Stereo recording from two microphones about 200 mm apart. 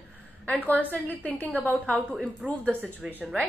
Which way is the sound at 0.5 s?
10° left (ahead or behind).